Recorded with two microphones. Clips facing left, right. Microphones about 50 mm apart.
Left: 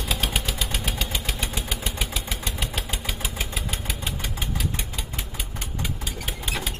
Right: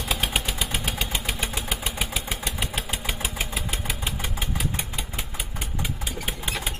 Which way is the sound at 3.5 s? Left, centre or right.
Centre.